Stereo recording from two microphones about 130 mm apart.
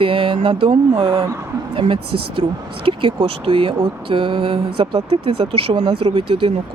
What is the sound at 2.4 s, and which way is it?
Speech, 40° right (ahead or behind).